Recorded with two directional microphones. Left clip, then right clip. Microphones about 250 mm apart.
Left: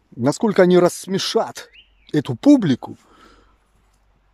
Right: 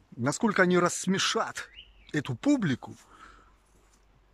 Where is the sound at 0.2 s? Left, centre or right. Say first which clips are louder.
Left 10 dB; centre.